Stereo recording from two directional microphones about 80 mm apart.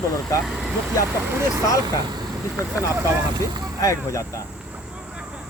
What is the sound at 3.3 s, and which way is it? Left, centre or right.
Speech, right.